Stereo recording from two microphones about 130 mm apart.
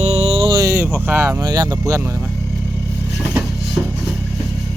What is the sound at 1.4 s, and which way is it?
Speech, 30° right (ahead or behind).